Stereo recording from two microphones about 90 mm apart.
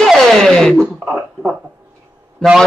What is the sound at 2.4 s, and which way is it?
Speech, 10° left (ahead or behind).